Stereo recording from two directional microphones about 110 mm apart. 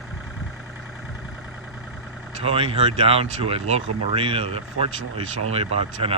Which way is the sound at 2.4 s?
60° right (ahead or behind).